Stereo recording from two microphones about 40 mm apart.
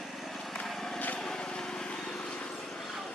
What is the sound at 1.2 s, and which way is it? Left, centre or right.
Lawn mower, centre.